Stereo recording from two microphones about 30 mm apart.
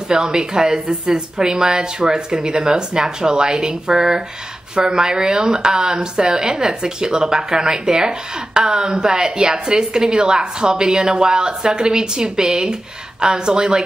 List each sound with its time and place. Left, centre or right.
0.1 s a woman's voice: right